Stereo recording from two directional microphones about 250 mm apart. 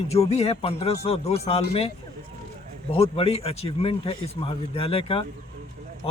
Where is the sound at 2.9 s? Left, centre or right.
Left.